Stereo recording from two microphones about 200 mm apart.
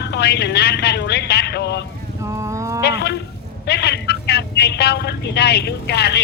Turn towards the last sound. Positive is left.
turn(degrees=55)  # may be behind; listen again after turning